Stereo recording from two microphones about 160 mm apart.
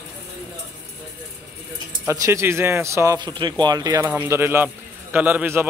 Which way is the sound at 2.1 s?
15° right (ahead or behind).